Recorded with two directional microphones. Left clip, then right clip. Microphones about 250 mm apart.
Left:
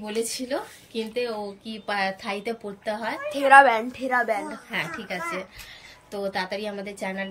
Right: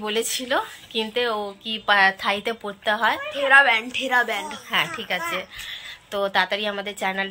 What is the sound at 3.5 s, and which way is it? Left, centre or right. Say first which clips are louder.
Speech: left 1 dB; left.